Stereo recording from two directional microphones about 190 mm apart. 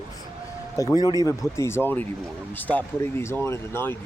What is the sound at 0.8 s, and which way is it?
Speech, 20° left (ahead or behind).